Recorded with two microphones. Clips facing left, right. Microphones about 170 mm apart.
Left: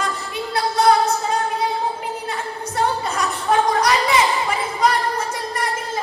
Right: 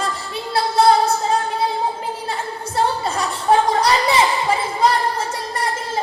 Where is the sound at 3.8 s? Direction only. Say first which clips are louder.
Right 1 dB; 30° right (ahead or behind).